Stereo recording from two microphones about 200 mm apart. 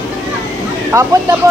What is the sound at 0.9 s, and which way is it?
Speech, 15° right (ahead or behind).